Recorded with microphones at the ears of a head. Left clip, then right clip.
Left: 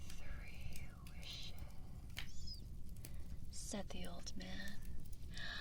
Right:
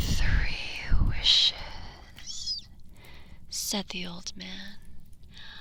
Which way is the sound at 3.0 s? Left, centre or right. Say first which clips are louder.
Right 11 dB; right.